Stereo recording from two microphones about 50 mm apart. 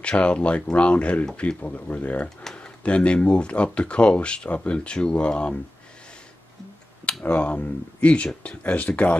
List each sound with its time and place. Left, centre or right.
0.0 s speech: left
7.2 s speech: left